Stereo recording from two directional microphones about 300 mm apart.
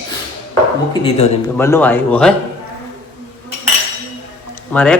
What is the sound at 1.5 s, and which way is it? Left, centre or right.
Speech, centre.